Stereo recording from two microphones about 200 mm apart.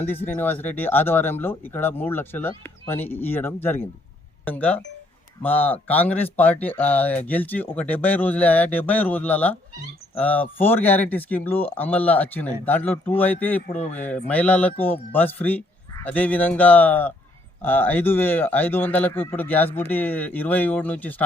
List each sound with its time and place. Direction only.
0.0 s speech: 10° left (ahead or behind)